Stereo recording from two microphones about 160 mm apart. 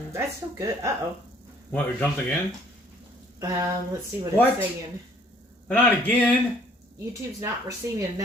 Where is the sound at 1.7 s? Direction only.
10° left (ahead or behind).